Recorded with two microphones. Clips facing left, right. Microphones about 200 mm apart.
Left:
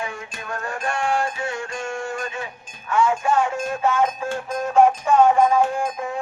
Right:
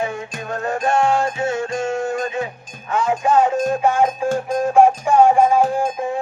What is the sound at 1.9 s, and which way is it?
Music, 20° right (ahead or behind).